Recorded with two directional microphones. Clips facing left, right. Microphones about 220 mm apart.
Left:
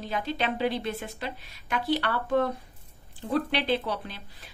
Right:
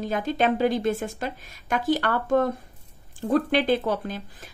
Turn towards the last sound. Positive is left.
turn(degrees=-45)  # may be behind; listen again after turning